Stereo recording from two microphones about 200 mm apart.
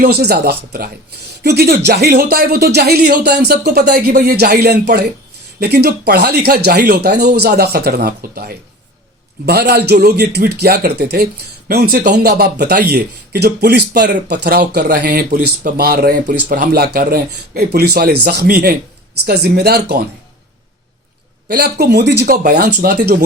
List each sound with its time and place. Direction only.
0.0 s speech: 50° right (ahead or behind)
21.5 s speech: 55° right (ahead or behind)